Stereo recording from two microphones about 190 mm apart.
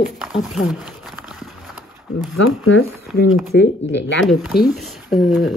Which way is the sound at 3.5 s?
65° left (ahead or behind).